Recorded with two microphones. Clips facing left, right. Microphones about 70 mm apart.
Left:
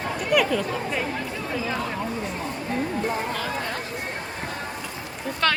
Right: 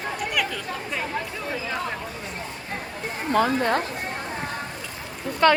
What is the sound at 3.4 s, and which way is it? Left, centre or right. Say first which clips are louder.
Speech: right 8 dB; right.